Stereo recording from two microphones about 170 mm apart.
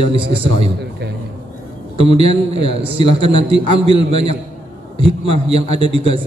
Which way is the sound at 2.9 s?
35° right (ahead or behind).